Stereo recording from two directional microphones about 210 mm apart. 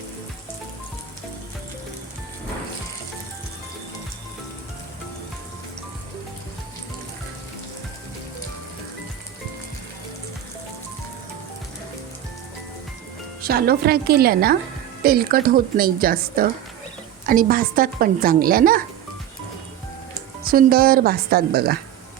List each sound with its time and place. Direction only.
13.4 s a woman's voice: 45° right (ahead or behind)
20.4 s a woman's voice: 45° right (ahead or behind)